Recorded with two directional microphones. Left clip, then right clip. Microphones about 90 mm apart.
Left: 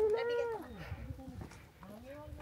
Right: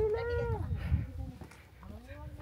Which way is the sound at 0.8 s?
5° left (ahead or behind).